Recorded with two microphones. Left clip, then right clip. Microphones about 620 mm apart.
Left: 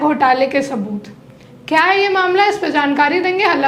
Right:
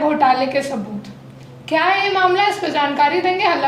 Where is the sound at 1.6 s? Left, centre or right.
Left.